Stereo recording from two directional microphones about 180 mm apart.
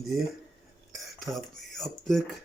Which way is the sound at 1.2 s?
Centre (ahead or behind).